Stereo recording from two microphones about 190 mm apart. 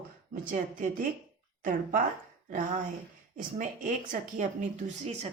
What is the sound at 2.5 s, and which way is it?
Speech, 45° right (ahead or behind).